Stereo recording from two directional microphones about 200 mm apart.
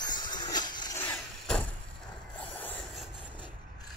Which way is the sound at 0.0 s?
20° left (ahead or behind).